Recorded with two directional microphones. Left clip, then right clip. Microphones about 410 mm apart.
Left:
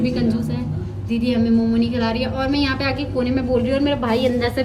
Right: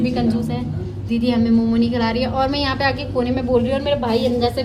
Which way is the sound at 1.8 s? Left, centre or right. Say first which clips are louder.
Right 2 dB; right.